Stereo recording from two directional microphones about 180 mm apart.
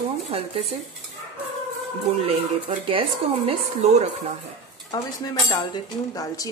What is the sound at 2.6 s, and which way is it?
A woman's voice, 30° right (ahead or behind).